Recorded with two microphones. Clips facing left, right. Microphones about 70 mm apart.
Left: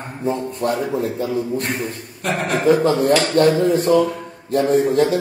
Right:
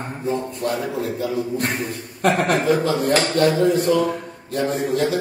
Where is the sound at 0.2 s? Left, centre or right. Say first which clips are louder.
Left 3 dB; left.